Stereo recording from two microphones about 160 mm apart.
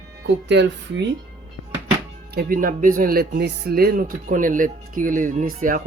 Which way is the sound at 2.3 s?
70° right (ahead or behind).